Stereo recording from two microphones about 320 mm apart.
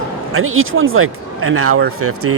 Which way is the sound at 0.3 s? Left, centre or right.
Right.